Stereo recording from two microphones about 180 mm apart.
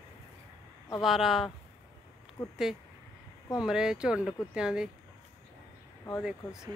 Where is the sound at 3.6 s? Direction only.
5° right (ahead or behind).